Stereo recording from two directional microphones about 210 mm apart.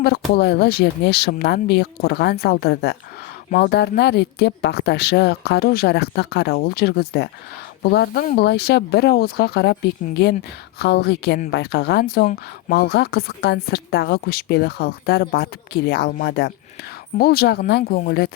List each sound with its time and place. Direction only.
0.0 s a woman's voice: 50° left (ahead or behind)